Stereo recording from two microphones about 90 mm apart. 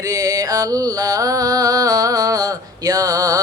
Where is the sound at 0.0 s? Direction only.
40° right (ahead or behind).